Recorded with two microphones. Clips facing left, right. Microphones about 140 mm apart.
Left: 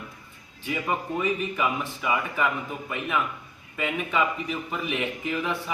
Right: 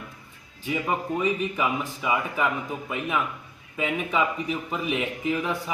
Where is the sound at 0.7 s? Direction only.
5° right (ahead or behind).